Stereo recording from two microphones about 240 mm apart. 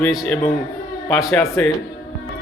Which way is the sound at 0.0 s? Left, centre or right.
Centre.